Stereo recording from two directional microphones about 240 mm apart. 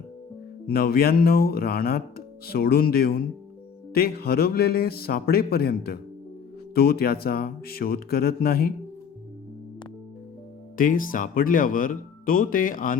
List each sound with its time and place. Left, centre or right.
0.7 s speech: left
10.8 s speech: left